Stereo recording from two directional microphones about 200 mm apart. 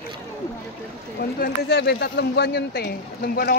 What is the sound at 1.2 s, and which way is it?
Speech, 55° left (ahead or behind).